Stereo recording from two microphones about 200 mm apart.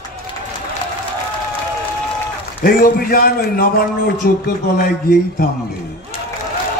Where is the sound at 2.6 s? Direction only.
45° left (ahead or behind).